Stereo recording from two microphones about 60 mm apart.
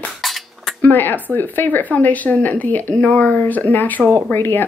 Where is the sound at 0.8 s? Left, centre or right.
Left.